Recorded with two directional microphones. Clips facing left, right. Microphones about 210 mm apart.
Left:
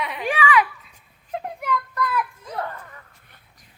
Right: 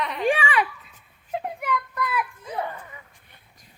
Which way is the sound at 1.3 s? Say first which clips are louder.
Left 1 dB; 5° right (ahead or behind).